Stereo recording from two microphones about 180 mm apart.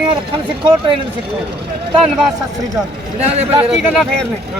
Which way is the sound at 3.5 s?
15° right (ahead or behind).